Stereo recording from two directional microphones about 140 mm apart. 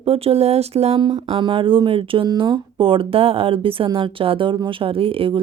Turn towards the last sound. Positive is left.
turn(degrees=-40)  # may be behind; listen again after turning